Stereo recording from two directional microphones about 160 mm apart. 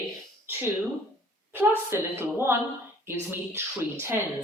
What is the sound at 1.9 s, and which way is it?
Speech, 15° right (ahead or behind).